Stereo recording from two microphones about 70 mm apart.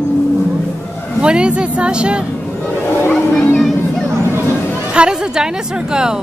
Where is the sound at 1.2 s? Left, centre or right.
Centre.